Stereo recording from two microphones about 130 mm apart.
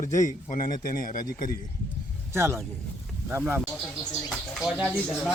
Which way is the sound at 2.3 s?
20° right (ahead or behind).